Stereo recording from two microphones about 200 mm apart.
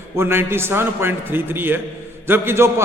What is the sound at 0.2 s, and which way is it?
A man's voice, 10° right (ahead or behind).